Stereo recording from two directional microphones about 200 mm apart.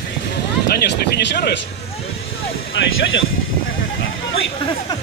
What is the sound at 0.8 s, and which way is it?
Speech, 55° left (ahead or behind).